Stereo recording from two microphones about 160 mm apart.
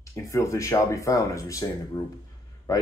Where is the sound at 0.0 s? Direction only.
20° left (ahead or behind).